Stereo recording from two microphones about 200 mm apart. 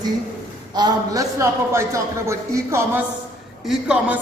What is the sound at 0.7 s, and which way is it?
A man's voice, 20° right (ahead or behind).